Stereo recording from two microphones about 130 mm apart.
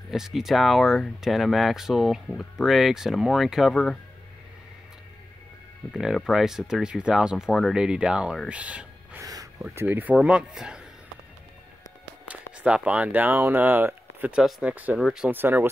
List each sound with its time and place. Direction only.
0.1 s speech: 5° right (ahead or behind)
5.9 s speech: centre (ahead or behind)
9.2 s a sound: 25° right (ahead or behind)
9.8 s speech: 15° right (ahead or behind)
12.3 s speech: 10° right (ahead or behind)
15.3 s speech: 15° right (ahead or behind)